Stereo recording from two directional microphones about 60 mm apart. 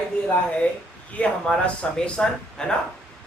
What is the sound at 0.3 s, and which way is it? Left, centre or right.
Speech, left.